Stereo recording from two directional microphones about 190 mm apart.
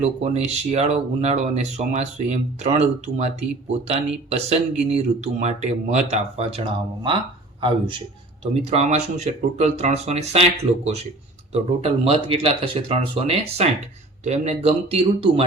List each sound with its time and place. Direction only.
0.0 s speech: 35° right (ahead or behind)
11.5 s speech: 30° right (ahead or behind)